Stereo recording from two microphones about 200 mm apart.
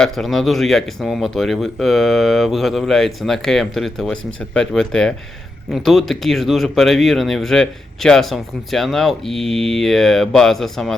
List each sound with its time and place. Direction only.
0.0 s speech: centre (ahead or behind)
4.2 s speech: 75° right (ahead or behind)
4.5 s speech: 5° left (ahead or behind)